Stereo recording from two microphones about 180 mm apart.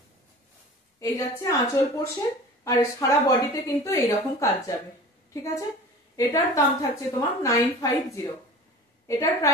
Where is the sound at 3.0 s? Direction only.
20° left (ahead or behind).